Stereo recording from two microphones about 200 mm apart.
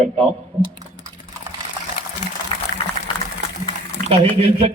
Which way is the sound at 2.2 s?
40° left (ahead or behind).